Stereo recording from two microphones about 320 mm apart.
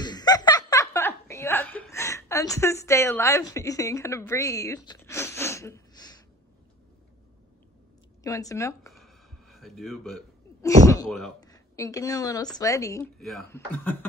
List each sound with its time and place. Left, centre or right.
0.0 s chuckle: centre
8.2 s a sound: centre
11.4 s speech: centre